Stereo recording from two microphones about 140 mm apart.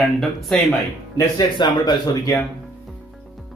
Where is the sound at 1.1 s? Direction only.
30° left (ahead or behind).